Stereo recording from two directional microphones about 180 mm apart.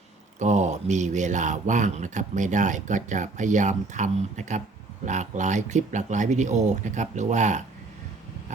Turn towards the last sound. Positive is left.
turn(degrees=-40)  # may be behind; listen again after turning